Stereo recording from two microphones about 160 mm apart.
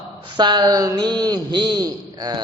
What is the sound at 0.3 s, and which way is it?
A man's voice, 30° right (ahead or behind).